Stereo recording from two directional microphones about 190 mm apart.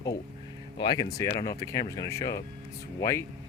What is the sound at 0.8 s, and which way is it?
Speech, 20° left (ahead or behind).